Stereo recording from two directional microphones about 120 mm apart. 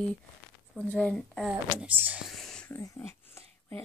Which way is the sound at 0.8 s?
10° left (ahead or behind).